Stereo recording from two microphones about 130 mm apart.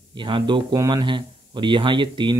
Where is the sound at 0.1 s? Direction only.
35° right (ahead or behind).